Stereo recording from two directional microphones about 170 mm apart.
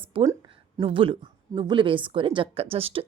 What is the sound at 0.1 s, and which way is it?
A woman's voice, 30° right (ahead or behind).